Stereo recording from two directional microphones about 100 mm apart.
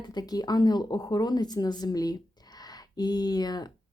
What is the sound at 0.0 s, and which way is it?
Speech, 45° left (ahead or behind).